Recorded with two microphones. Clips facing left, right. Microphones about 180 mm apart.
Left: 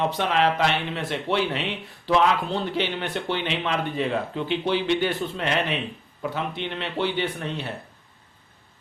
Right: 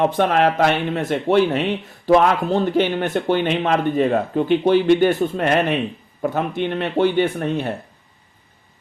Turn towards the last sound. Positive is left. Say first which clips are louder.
# right 8 dB
turn(degrees=-50)  # may be behind; listen again after turning